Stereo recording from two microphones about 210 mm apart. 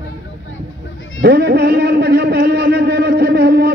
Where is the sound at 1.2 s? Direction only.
50° right (ahead or behind).